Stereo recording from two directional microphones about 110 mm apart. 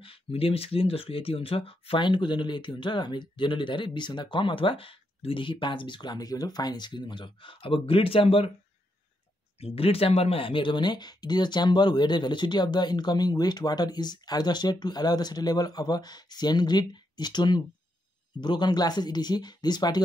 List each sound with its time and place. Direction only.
0.0 s speech: 60° left (ahead or behind)
9.6 s speech: 60° left (ahead or behind); by 20.0 s 40° left (ahead or behind)